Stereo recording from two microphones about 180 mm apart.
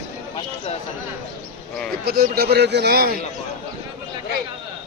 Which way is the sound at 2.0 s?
60° right (ahead or behind).